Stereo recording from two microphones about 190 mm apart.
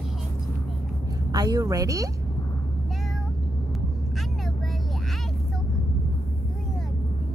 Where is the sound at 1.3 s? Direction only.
20° right (ahead or behind).